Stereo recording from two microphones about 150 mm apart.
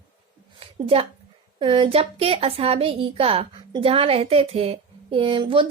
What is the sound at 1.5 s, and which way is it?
A woman's voice, 35° right (ahead or behind).